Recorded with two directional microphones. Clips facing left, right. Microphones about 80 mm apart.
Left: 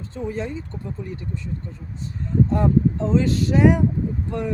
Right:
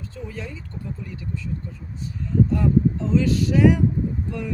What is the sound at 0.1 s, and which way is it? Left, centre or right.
Speech, left.